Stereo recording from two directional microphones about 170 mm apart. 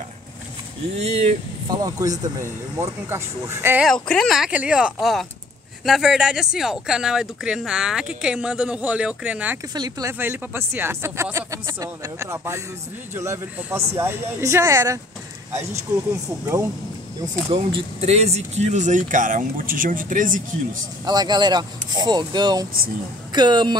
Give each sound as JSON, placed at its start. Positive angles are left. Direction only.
{"t": 0.9, "sound": "speech", "side_deg": -40}
{"t": 1.7, "sound": "speech", "side_deg": -20}
{"t": 3.8, "sound": "speech", "side_deg": 5}
{"t": 9.8, "sound": "speech", "side_deg": -25}
{"t": 17.5, "sound": "speech", "side_deg": -30}
{"t": 21.0, "sound": "speech", "side_deg": -25}